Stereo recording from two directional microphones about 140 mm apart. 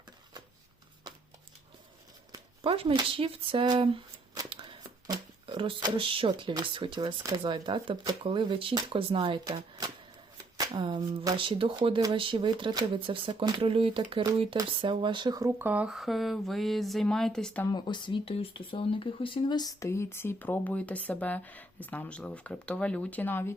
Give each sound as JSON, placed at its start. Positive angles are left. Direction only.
{"t": 2.6, "sound": "speech", "side_deg": -40}
{"t": 7.2, "sound": "speech", "side_deg": -25}
{"t": 17.7, "sound": "speech", "side_deg": 30}